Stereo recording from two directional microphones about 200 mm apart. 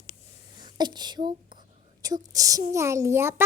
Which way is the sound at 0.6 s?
20° right (ahead or behind).